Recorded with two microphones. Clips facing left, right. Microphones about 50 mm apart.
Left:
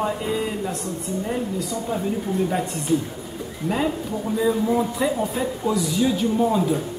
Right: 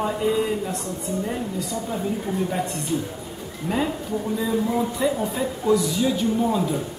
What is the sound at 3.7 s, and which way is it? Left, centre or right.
Speech, right.